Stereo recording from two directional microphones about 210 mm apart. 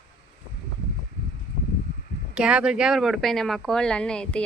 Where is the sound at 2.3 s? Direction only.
5° right (ahead or behind).